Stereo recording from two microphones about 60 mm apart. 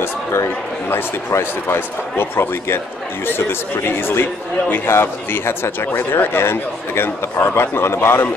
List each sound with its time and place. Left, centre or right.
0.0 s a man's voice: left